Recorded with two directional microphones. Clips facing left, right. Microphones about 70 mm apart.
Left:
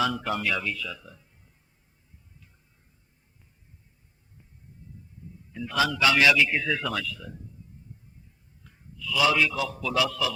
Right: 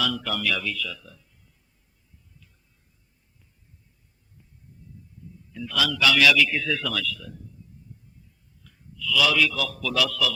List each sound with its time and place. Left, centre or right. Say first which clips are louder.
0.0 s a man's voice: left 1 dB; left
5.5 s a man's voice: left 1 dB; left
7.9 s a sound: right 1 dB; left
8.6 s a man's voice: right 5 dB; left